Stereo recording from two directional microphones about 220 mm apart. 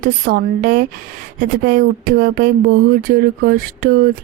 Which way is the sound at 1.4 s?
40° right (ahead or behind).